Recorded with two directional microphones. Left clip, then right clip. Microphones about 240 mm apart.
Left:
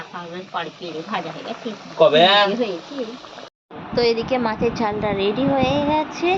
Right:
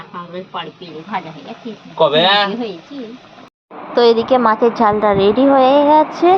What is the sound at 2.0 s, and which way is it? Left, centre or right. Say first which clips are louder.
Speech: right 1 dB; right.